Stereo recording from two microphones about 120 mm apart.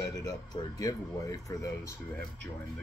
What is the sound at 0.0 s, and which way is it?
Speech, 30° left (ahead or behind).